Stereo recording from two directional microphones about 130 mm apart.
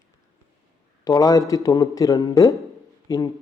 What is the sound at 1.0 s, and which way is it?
Speech, 25° left (ahead or behind).